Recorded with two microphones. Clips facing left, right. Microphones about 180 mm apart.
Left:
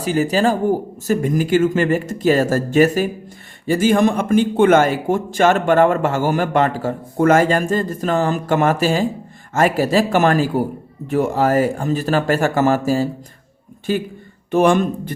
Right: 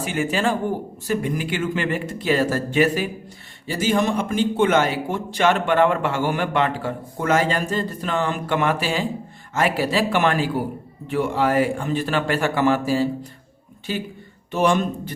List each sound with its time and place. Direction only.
0.0 s a man's voice: 35° left (ahead or behind)